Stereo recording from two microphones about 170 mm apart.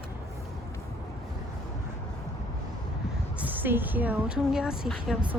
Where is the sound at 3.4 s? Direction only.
10° right (ahead or behind).